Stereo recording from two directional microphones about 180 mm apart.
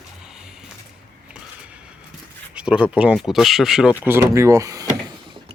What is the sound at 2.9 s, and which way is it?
Speech, 5° right (ahead or behind).